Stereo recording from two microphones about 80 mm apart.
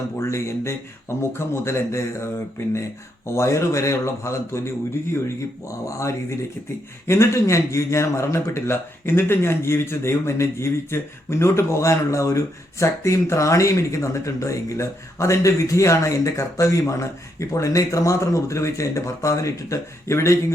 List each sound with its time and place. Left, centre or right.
0.2 s a man's voice: left